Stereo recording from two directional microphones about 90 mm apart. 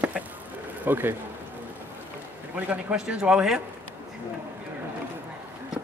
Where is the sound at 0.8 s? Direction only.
25° right (ahead or behind).